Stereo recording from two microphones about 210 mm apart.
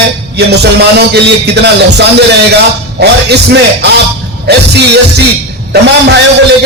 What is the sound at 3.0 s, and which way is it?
Music, 50° right (ahead or behind).